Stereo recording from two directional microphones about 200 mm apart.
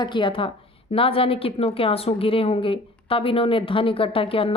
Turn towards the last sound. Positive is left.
turn(degrees=25)  # may be behind; listen again after turning